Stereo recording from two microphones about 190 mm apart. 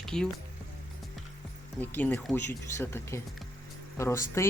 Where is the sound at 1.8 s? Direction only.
10° left (ahead or behind).